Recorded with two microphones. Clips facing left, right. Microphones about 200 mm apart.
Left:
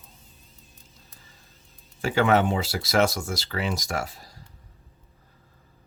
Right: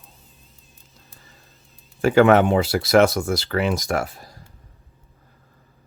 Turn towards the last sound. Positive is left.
turn(degrees=-55)  # may be behind; listen again after turning